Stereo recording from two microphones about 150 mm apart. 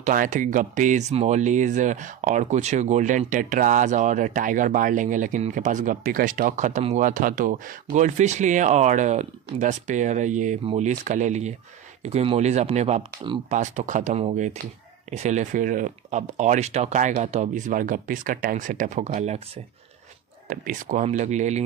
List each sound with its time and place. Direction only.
0.0 s speech: 60° right (ahead or behind)
10.6 s speech: 40° right (ahead or behind)
10.9 s speech: 55° right (ahead or behind)
20.4 s speech: 60° right (ahead or behind)